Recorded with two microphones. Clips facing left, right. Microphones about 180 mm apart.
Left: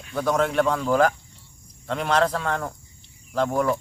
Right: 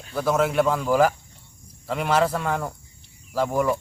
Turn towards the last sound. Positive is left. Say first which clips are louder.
# even
turn(degrees=-10)  # may be behind; listen again after turning